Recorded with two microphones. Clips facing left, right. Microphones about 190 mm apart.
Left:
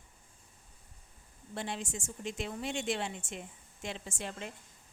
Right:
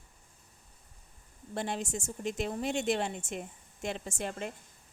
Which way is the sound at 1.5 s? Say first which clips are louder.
Right 4 dB; 45° right (ahead or behind).